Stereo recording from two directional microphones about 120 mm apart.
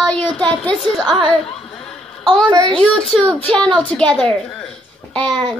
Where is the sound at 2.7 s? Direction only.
5° left (ahead or behind).